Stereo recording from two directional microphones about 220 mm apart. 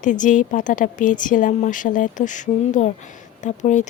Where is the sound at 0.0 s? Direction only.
35° left (ahead or behind).